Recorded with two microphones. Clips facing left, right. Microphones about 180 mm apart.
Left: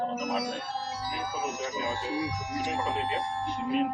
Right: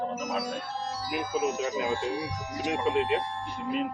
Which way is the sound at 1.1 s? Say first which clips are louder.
Right 8 dB; 65° right (ahead or behind).